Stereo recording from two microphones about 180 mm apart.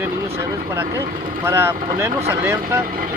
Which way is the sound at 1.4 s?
15° right (ahead or behind).